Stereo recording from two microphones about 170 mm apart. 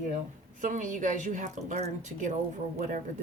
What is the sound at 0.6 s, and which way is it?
Speech, 50° right (ahead or behind).